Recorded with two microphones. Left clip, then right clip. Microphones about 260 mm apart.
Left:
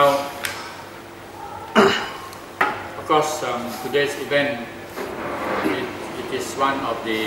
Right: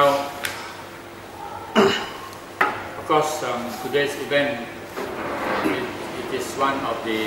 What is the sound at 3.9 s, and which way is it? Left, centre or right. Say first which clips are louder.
Speech: left 1 dB; centre.